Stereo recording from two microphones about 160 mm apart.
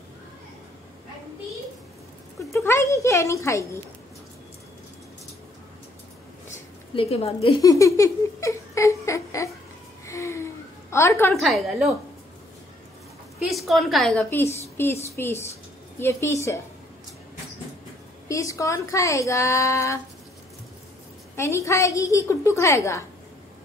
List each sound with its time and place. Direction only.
2.5 s a woman's voice: 15° left (ahead or behind)
7.0 s speech: 40° left (ahead or behind)
7.6 s a sound: 20° left (ahead or behind)
11.3 s a woman's voice: centre (ahead or behind)
13.4 s a woman's voice: centre (ahead or behind)
15.0 s a woman's voice: 15° left (ahead or behind)
18.3 s speech: 20° left (ahead or behind)
21.4 s a woman's voice: 20° left (ahead or behind)